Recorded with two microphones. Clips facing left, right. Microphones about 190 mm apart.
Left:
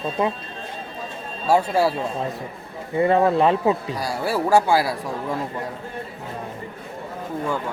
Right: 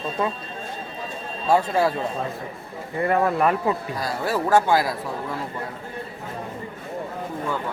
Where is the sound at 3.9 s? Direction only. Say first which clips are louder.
Left 1 dB; 10° left (ahead or behind).